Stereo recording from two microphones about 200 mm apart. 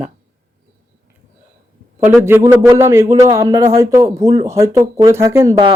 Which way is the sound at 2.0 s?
10° right (ahead or behind).